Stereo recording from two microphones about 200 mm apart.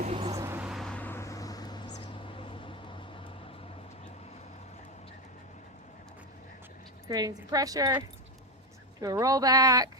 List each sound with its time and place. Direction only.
0.0 s vehicle: 30° right (ahead or behind)
0.3 s vehicle: 10° right (ahead or behind); by 3.0 s 25° left (ahead or behind)
7.1 s speech: 20° right (ahead or behind)